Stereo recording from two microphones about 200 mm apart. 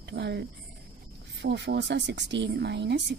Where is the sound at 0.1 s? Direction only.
60° right (ahead or behind).